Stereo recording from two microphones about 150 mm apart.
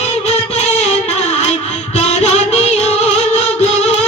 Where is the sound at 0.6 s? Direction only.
45° left (ahead or behind).